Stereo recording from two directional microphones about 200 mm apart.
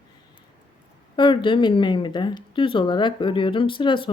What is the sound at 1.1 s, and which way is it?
Speech, 25° left (ahead or behind).